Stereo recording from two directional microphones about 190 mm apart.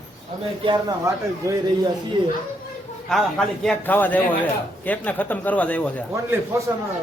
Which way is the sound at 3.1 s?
5° left (ahead or behind).